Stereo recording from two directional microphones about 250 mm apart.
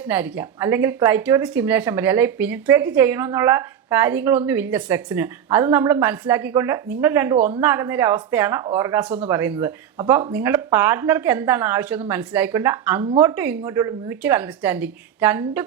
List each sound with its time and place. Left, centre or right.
0.1 s speech: centre
7.3 s a woman's voice: right
7.6 s speech: centre